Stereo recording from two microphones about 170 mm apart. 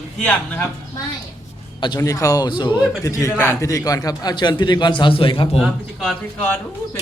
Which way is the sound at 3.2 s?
15° left (ahead or behind).